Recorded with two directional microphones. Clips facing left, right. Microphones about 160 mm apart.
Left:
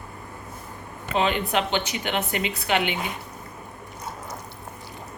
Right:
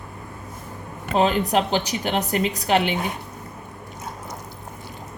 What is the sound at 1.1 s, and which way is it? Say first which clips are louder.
A woman's voice: right 4 dB; 40° right (ahead or behind).